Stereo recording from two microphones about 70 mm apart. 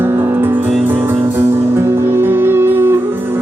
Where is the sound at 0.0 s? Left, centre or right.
Right.